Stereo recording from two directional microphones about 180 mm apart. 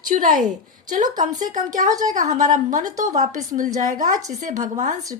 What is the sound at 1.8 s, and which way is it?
A woman's voice, 45° right (ahead or behind).